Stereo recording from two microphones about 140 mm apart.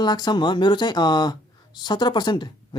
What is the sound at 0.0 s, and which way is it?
Speech, 30° left (ahead or behind).